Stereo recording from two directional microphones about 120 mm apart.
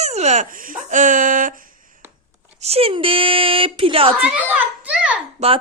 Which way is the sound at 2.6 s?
55° right (ahead or behind).